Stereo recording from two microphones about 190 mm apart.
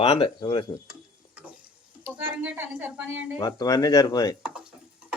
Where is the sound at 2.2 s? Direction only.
10° right (ahead or behind).